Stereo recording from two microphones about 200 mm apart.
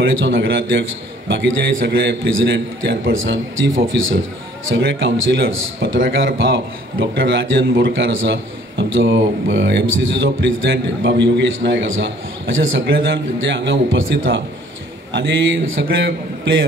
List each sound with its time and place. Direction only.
0.0 s a man's voice: 65° right (ahead or behind)